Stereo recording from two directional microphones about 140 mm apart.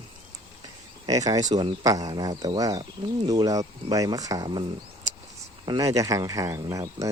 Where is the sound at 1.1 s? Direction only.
25° right (ahead or behind).